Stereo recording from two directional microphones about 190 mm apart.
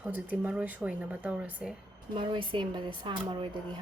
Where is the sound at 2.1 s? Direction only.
25° right (ahead or behind).